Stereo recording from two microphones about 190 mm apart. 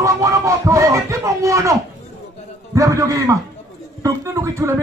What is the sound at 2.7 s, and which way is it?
A man's voice, 15° right (ahead or behind).